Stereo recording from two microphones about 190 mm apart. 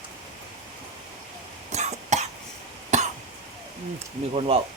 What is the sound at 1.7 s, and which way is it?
Cough, 35° right (ahead or behind).